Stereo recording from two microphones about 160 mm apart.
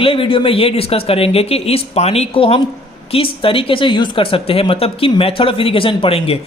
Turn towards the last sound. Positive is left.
turn(degrees=35)  # may be behind; listen again after turning